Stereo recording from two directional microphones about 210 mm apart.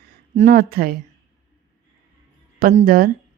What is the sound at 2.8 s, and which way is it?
Speech, 40° right (ahead or behind).